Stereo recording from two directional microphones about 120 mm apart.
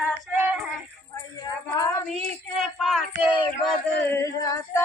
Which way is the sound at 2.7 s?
Centre (ahead or behind).